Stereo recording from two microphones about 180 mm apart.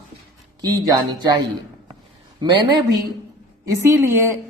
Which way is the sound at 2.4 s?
25° right (ahead or behind).